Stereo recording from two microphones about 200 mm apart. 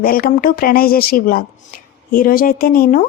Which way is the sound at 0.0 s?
45° left (ahead or behind).